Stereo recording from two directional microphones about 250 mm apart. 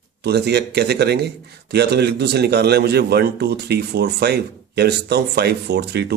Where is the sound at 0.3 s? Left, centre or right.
Right.